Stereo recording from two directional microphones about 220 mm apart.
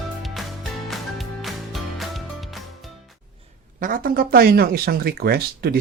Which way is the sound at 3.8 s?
40° right (ahead or behind).